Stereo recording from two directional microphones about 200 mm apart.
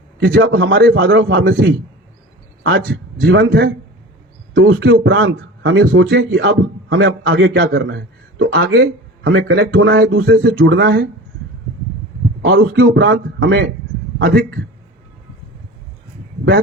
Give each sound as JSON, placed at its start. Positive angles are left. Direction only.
{"t": 0.2, "sound": "a man's voice", "side_deg": -50}
{"t": 1.1, "sound": "a man's voice", "side_deg": -75}
{"t": 5.9, "sound": "a man's voice", "side_deg": -60}
{"t": 12.4, "sound": "a man's voice", "side_deg": -55}